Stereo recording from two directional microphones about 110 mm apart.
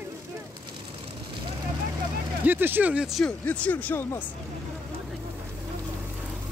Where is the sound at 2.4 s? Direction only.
15° right (ahead or behind).